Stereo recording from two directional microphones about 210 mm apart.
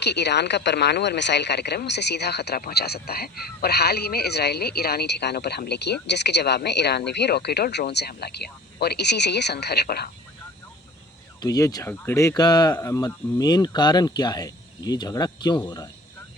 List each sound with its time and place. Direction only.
0.0 s speech: 55° left (ahead or behind)
11.3 s speech: 15° left (ahead or behind)